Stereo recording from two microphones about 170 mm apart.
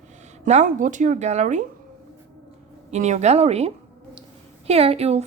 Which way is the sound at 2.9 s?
40° right (ahead or behind).